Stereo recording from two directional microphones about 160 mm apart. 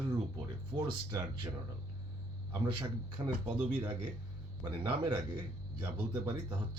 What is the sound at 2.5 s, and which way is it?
Speech, 30° right (ahead or behind).